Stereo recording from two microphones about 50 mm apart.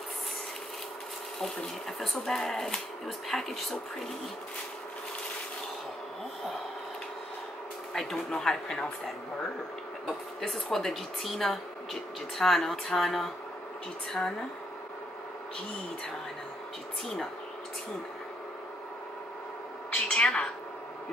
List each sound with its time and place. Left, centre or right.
1.4 s speech: centre
7.9 s speech: centre
17.0 s speech: centre
19.9 s a sound: centre